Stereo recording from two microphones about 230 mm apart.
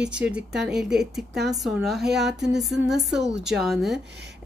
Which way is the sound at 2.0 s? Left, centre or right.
Right.